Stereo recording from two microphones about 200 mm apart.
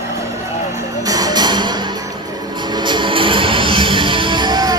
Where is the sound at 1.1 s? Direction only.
20° right (ahead or behind).